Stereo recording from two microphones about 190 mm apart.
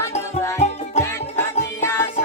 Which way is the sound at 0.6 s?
35° left (ahead or behind).